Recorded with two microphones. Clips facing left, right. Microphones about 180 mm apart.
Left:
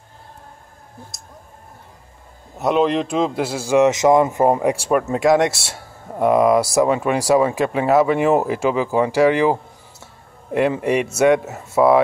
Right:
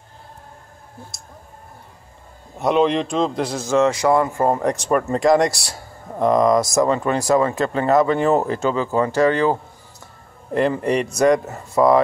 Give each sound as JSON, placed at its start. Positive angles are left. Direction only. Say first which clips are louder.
{"t": 2.5, "sound": "speech", "louder": "even", "side_deg": 0}